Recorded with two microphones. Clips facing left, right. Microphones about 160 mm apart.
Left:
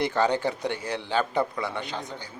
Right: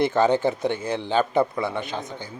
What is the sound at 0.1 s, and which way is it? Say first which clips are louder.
Speech: right 4 dB; 20° right (ahead or behind).